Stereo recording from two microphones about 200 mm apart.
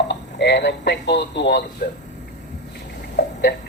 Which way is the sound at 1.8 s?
50° left (ahead or behind).